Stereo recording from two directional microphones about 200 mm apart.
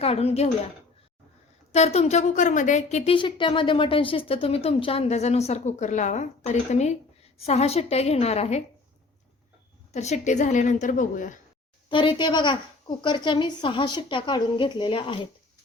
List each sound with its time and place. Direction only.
0.0 s speech: 30° left (ahead or behind)
1.7 s speech: 35° left (ahead or behind)
9.9 s speech: 35° left (ahead or behind)
11.9 s a woman's voice: 25° left (ahead or behind)